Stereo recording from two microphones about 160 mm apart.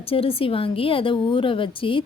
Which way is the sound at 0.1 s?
35° left (ahead or behind).